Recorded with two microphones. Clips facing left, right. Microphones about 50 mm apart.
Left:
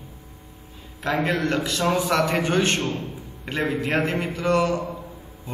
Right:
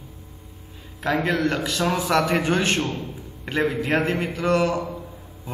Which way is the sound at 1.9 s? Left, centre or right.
Right.